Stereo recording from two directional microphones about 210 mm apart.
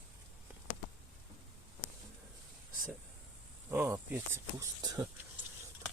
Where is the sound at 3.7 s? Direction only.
10° right (ahead or behind).